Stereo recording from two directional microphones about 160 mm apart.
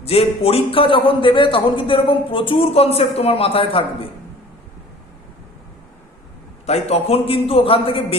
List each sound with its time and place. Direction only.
0.0 s a man's voice: 40° left (ahead or behind)
6.7 s a man's voice: 40° left (ahead or behind)